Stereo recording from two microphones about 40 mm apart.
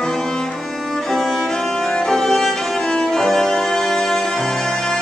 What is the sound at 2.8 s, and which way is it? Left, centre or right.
Music, centre.